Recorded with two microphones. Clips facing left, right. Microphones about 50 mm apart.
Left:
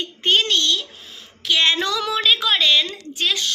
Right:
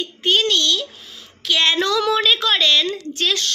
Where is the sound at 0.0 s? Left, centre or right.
Left.